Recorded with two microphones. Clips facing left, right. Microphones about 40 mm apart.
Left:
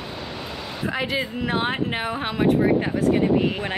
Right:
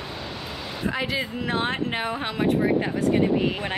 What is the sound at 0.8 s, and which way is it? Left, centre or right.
Speech, centre.